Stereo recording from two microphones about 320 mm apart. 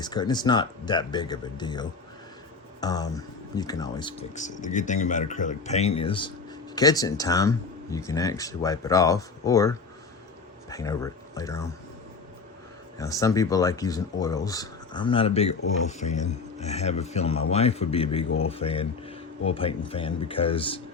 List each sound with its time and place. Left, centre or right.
0.0 s speech: centre
13.0 s speech: centre